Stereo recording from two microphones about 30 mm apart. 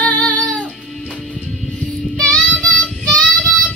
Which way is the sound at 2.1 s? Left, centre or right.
Left.